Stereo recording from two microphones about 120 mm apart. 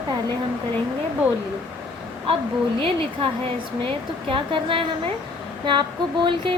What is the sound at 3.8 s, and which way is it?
Speech, 45° right (ahead or behind).